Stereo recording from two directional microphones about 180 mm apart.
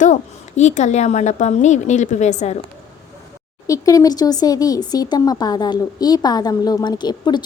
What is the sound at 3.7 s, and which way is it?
Speech, 20° left (ahead or behind).